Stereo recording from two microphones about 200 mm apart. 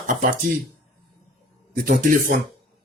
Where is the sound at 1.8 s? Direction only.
45° right (ahead or behind).